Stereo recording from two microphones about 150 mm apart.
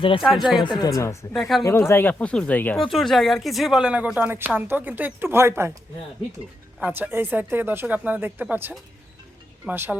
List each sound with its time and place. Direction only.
0.2 s speech: centre (ahead or behind)
0.6 s speech: 30° left (ahead or behind)
1.3 s speech: centre (ahead or behind)
1.6 s speech: 15° left (ahead or behind); by 5.7 s 15° right (ahead or behind)
6.7 s speech: 10° right (ahead or behind)